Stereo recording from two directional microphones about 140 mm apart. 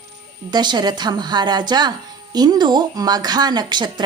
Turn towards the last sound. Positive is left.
turn(degrees=-30)  # may be behind; listen again after turning